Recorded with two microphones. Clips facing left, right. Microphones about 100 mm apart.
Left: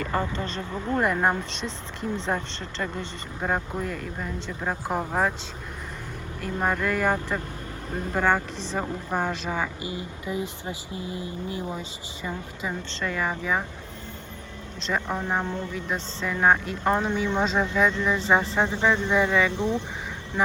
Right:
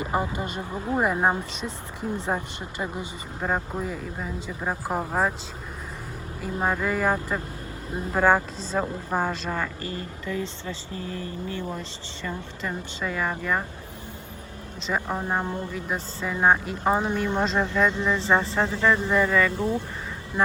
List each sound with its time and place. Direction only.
0.0 s speech: 15° right (ahead or behind)
1.2 s speech: 5° right (ahead or behind)
6.4 s speech: 5° right (ahead or behind); by 11.6 s 15° left (ahead or behind)
11.6 s speech: centre (ahead or behind)
12.9 s speech: 5° right (ahead or behind)
14.8 s speech: 5° right (ahead or behind)
17.8 s speech: 15° right (ahead or behind)
18.3 s speech: centre (ahead or behind)